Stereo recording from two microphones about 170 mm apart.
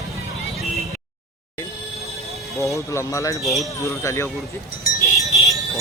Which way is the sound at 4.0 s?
15° left (ahead or behind).